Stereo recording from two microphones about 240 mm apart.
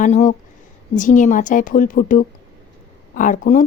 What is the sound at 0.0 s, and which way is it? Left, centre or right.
A woman's voice, left.